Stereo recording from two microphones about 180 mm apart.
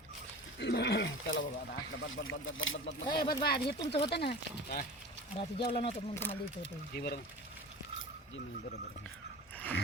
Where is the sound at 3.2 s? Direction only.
60° left (ahead or behind).